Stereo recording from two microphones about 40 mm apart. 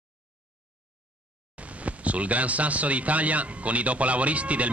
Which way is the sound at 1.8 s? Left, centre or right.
Right.